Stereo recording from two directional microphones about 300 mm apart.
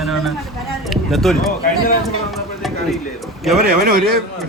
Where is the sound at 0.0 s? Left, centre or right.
Centre.